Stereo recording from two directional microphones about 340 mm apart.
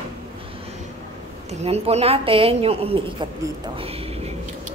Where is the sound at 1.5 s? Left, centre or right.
Centre.